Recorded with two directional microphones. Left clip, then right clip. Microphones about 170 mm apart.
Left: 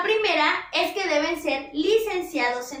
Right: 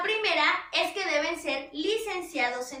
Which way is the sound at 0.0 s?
5° left (ahead or behind).